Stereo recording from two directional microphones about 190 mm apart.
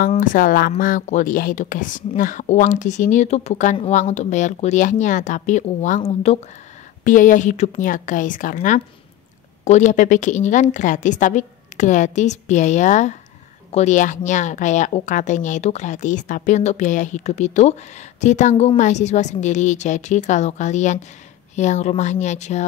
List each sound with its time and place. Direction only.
0.1 s a woman's voice: 45° left (ahead or behind)